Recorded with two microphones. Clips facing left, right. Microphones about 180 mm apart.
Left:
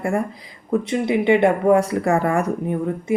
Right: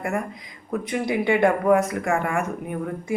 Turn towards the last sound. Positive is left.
turn(degrees=25)  # may be behind; listen again after turning